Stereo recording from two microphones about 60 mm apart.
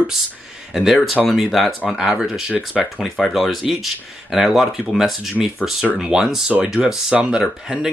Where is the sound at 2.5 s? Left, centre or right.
Right.